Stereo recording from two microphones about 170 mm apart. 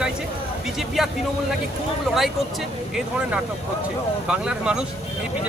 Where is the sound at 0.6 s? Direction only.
Centre (ahead or behind).